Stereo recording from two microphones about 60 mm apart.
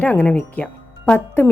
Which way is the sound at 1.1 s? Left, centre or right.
Left.